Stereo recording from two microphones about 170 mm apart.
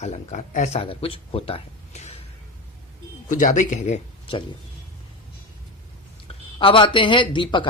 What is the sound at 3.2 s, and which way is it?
Speech, 50° left (ahead or behind).